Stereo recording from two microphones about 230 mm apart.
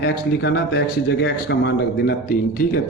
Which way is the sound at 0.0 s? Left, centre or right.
Left.